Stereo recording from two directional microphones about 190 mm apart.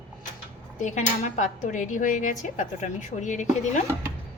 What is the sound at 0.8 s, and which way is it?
Speech, 40° left (ahead or behind).